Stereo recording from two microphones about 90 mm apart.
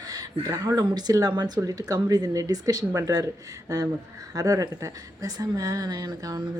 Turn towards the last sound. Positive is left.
turn(degrees=-50)  # may be behind; listen again after turning